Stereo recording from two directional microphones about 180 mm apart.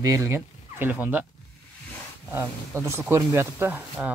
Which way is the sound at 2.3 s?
15° right (ahead or behind).